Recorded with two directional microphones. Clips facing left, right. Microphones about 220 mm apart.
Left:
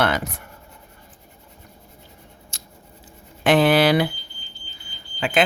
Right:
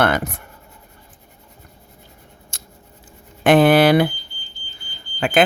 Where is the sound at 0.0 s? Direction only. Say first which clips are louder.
Right 3 dB; 55° right (ahead or behind).